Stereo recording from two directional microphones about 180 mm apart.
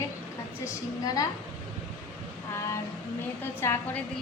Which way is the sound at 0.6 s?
20° left (ahead or behind).